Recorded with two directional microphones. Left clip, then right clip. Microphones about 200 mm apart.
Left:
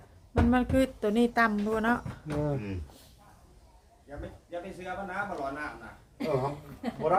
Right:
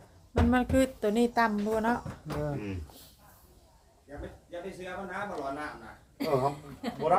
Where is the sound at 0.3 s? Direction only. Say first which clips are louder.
Even; centre (ahead or behind).